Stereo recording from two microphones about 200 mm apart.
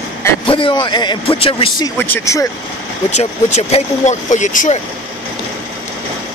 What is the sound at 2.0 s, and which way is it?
Speech, 15° left (ahead or behind).